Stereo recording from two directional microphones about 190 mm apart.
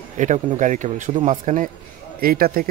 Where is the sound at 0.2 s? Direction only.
40° right (ahead or behind).